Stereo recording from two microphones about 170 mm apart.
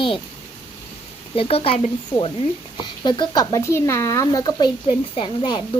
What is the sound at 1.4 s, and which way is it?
Speech, 35° left (ahead or behind).